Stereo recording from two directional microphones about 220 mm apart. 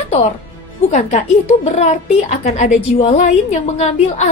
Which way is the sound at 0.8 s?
30° left (ahead or behind).